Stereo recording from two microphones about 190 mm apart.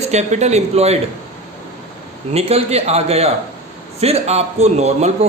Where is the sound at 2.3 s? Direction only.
35° right (ahead or behind).